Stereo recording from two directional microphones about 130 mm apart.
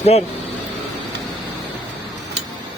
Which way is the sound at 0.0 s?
55° left (ahead or behind).